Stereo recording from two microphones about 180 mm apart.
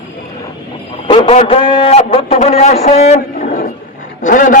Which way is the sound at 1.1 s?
30° left (ahead or behind).